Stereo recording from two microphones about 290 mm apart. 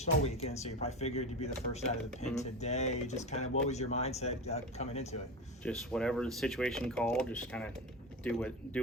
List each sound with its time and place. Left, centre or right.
0.0 s speech: left
5.6 s speech: centre